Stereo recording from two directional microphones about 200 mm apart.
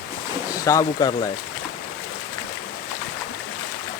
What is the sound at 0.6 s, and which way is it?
Speech, 15° left (ahead or behind).